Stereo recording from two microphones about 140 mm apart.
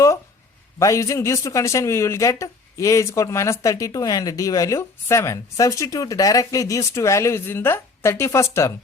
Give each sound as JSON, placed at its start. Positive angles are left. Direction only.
{"t": 0.8, "sound": "speech", "side_deg": 20}